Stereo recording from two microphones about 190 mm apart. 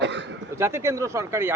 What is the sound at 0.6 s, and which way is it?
Speech, 15° right (ahead or behind).